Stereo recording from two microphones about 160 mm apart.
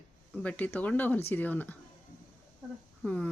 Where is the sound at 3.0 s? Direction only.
5° left (ahead or behind).